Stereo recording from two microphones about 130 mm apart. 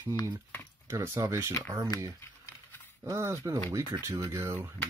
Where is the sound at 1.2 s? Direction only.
25° right (ahead or behind).